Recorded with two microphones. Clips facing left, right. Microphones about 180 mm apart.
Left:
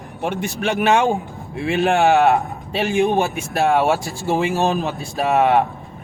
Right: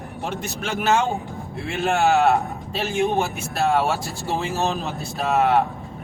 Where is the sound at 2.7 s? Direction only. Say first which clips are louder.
Left 6 dB; 80° left.